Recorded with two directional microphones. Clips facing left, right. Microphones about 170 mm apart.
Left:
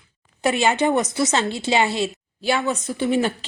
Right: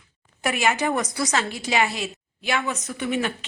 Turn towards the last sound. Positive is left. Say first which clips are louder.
# left 5 dB
turn(degrees=30)  # may be behind; listen again after turning